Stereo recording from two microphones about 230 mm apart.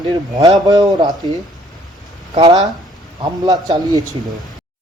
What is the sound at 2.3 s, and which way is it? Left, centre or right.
Speech, right.